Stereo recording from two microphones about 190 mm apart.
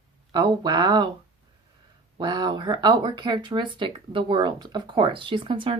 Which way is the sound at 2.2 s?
20° right (ahead or behind).